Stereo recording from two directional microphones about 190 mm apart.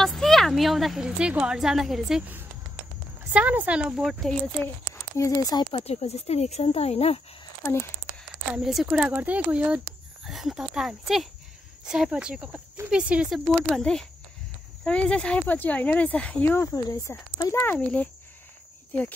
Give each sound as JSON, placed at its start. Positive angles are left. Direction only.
{"t": 0.0, "sound": "a woman's voice", "side_deg": 0}
{"t": 5.1, "sound": "speech", "side_deg": 15}
{"t": 8.5, "sound": "a woman's voice", "side_deg": -5}